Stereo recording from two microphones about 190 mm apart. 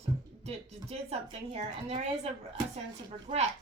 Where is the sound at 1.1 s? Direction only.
35° right (ahead or behind).